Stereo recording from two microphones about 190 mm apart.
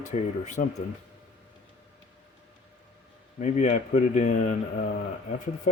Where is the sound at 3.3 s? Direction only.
40° left (ahead or behind).